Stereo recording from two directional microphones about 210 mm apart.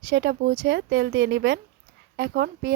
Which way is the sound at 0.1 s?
55° right (ahead or behind).